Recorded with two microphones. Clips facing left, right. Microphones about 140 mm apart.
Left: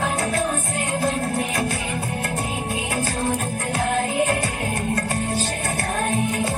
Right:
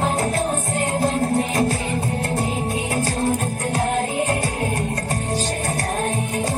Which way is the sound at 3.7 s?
35° right (ahead or behind).